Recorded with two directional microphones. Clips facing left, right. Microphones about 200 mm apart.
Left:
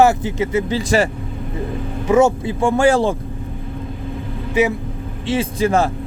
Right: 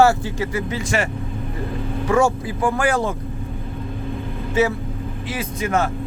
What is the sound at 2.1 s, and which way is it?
Speech, 20° left (ahead or behind).